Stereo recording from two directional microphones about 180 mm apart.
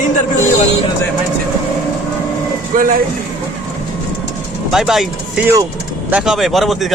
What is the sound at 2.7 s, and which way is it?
Speech, 50° right (ahead or behind).